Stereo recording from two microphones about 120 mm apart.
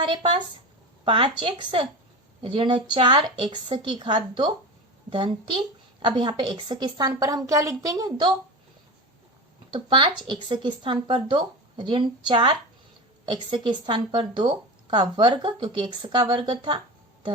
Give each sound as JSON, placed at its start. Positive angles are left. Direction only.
{"t": 1.0, "sound": "speech", "side_deg": -45}
{"t": 9.7, "sound": "speech", "side_deg": -45}